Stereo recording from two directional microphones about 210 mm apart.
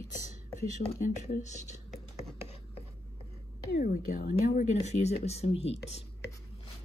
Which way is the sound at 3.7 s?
40° left (ahead or behind).